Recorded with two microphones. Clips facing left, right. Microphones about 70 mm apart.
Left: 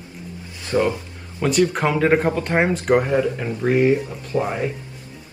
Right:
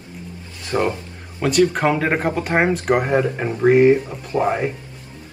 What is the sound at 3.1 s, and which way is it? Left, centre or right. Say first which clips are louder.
Speech: right 1 dB; right.